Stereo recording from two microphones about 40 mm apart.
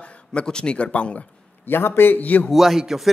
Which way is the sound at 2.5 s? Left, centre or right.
Centre.